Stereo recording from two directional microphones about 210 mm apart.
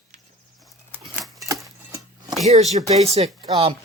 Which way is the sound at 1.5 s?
15° right (ahead or behind).